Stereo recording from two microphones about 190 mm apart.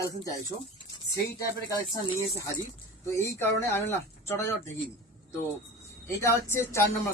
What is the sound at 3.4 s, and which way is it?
Speech, 10° left (ahead or behind).